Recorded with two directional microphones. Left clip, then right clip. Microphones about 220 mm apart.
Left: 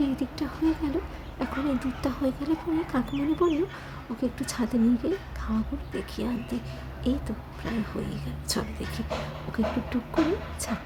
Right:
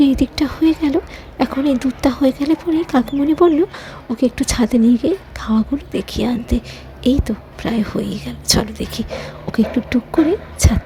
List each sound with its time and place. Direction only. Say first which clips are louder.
0.0 s speech: right 14 dB; 35° right (ahead or behind)